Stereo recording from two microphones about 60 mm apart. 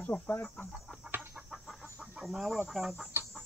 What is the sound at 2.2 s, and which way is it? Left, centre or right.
Speech, centre.